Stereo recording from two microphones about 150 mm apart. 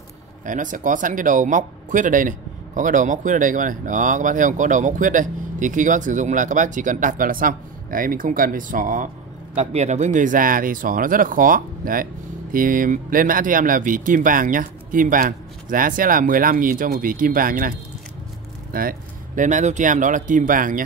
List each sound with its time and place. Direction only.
0.5 s speech: 60° right (ahead or behind)
9.6 s speech: 45° right (ahead or behind); by 20.8 s 65° right (ahead or behind)